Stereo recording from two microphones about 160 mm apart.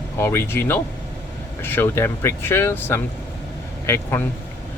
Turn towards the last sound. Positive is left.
turn(degrees=15)  # may be behind; listen again after turning